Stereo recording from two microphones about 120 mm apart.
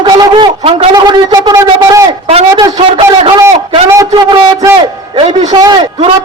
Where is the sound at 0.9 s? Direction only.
35° right (ahead or behind).